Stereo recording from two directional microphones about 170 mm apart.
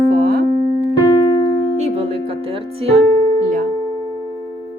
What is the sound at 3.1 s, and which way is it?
Music, 50° right (ahead or behind).